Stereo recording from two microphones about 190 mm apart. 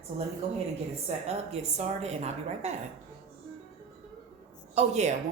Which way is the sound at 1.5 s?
35° right (ahead or behind).